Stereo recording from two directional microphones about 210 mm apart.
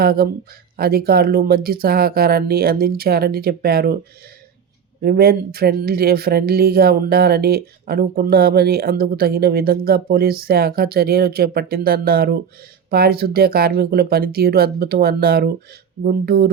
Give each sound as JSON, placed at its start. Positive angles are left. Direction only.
{"t": 0.0, "sound": "speech", "side_deg": -45}
{"t": 5.0, "sound": "speech", "side_deg": -45}